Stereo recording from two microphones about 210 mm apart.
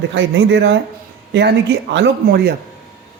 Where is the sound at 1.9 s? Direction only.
55° right (ahead or behind).